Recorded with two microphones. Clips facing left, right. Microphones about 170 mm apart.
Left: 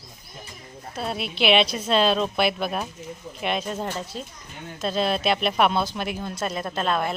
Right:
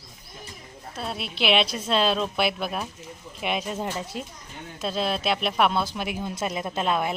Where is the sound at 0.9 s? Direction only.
Centre (ahead or behind); by 4.2 s 15° right (ahead or behind).